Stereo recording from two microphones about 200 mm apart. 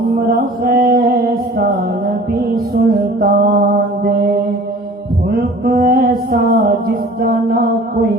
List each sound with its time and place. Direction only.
0.3 s mantra: 50° right (ahead or behind)
3.2 s mantra: 45° right (ahead or behind)
5.6 s music: 45° right (ahead or behind)